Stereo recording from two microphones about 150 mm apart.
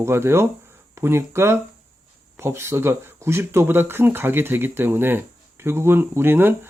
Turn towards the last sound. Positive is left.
turn(degrees=-15)  # may be behind; listen again after turning